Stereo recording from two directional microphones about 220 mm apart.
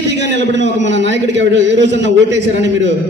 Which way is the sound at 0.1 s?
55° right (ahead or behind).